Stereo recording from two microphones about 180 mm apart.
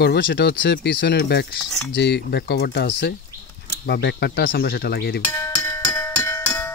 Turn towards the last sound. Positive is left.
turn(degrees=15)  # may be behind; listen again after turning